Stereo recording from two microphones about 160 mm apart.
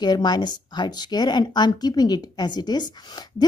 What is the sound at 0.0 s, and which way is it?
A woman's voice, 25° left (ahead or behind).